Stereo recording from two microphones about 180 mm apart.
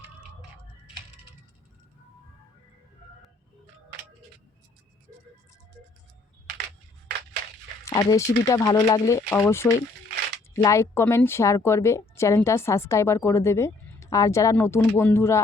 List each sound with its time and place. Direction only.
7.9 s a woman's voice: 15° left (ahead or behind)